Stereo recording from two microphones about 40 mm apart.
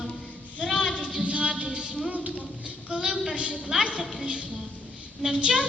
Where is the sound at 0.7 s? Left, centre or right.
Left.